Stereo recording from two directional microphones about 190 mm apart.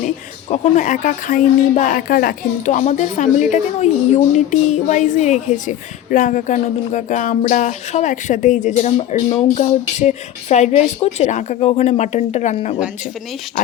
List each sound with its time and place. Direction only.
0.5 s a woman's voice: 40° left (ahead or behind)